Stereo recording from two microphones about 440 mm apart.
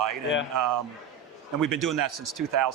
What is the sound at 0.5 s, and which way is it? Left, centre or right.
Speech, right.